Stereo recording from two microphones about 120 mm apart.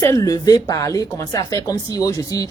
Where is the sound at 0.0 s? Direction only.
25° left (ahead or behind).